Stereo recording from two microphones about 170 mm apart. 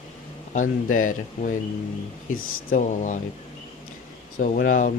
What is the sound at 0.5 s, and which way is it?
Speech, 50° left (ahead or behind).